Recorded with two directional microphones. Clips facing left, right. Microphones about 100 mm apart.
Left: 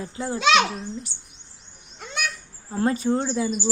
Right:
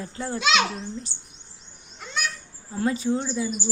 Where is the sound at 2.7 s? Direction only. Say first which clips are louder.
Left 2 dB; 45° left (ahead or behind); by 3.5 s 65° left (ahead or behind).